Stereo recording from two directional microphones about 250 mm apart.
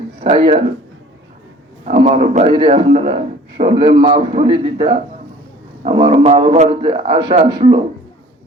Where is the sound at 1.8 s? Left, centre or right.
Right.